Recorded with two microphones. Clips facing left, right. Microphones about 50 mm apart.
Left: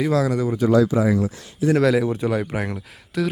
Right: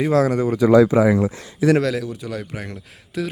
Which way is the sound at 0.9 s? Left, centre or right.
Right.